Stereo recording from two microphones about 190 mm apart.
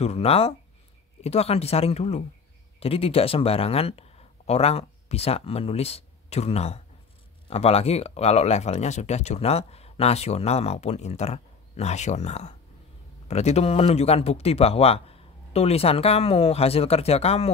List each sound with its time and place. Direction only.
0.0 s speech: 30° left (ahead or behind)